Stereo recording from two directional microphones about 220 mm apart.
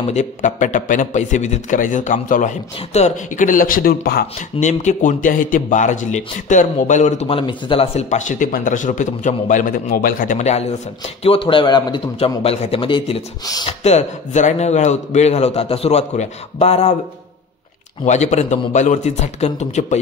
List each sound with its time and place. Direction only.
0.1 s a man's voice: 35° left (ahead or behind)
18.0 s a man's voice: 30° left (ahead or behind)